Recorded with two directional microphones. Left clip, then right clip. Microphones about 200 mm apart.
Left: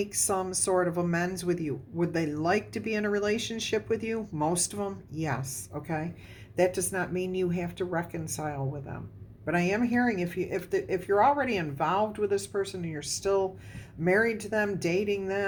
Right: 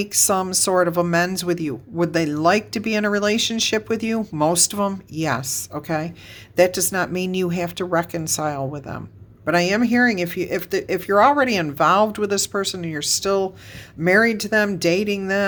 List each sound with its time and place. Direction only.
0.0 s a woman's voice: 35° right (ahead or behind)